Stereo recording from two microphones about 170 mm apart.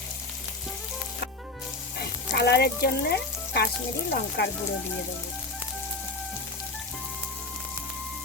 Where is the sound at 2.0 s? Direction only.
75° left (ahead or behind).